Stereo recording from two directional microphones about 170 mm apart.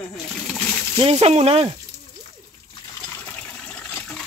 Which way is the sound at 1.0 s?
40° right (ahead or behind).